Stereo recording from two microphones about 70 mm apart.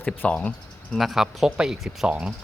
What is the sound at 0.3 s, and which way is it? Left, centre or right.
Speech, centre.